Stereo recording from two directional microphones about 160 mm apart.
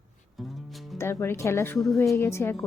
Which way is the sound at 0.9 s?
15° left (ahead or behind).